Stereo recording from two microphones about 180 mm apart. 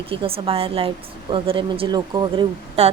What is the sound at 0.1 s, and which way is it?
A woman's voice, 30° right (ahead or behind).